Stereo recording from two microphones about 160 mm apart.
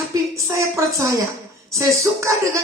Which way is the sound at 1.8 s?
20° right (ahead or behind).